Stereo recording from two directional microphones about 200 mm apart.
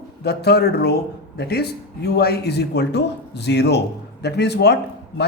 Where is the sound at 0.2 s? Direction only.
55° left (ahead or behind).